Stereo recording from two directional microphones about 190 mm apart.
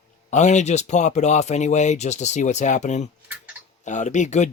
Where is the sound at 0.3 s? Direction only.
40° left (ahead or behind).